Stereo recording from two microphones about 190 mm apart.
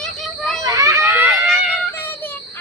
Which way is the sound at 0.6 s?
20° right (ahead or behind).